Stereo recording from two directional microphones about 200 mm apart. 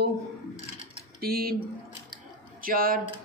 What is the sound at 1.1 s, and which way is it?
Speech, 50° right (ahead or behind).